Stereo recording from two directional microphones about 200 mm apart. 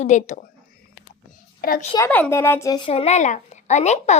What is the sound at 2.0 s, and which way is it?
A woman's voice, 5° left (ahead or behind).